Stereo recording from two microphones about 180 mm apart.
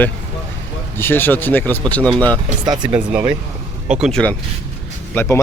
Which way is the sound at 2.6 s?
25° right (ahead or behind).